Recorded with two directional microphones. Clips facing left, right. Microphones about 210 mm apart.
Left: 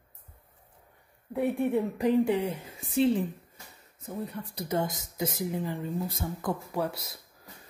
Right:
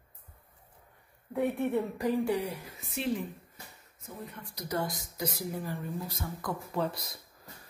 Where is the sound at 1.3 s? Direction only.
15° left (ahead or behind).